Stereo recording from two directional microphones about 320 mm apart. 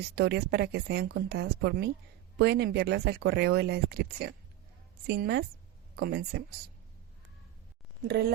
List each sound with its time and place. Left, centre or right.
0.2 s speech: right